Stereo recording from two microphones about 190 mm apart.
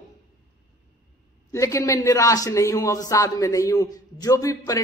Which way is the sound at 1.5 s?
15° left (ahead or behind).